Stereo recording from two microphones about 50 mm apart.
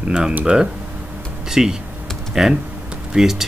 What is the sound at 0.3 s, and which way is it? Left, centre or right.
Speech, right.